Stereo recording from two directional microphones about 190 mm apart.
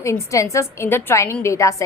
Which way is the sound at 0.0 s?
15° left (ahead or behind).